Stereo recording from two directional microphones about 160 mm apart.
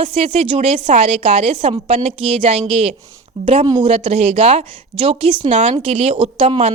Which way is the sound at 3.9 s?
40° right (ahead or behind).